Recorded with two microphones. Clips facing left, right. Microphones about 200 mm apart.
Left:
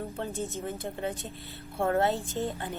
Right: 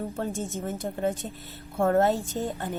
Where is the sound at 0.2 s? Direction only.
45° right (ahead or behind).